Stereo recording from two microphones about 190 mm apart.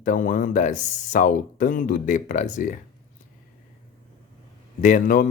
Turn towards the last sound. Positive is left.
turn(degrees=45)  # may be behind; listen again after turning